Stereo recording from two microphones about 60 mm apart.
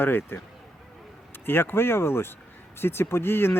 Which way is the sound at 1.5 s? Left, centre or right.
Left.